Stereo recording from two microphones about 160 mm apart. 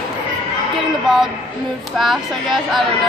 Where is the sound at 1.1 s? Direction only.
5° right (ahead or behind).